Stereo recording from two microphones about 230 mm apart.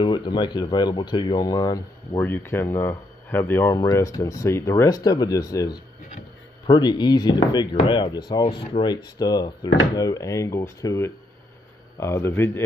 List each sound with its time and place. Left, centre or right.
0.0 s speech: centre